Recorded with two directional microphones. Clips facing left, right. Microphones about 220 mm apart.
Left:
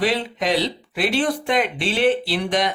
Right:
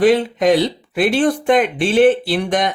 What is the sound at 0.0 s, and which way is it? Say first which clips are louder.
Speech: right 9 dB; 50° right (ahead or behind).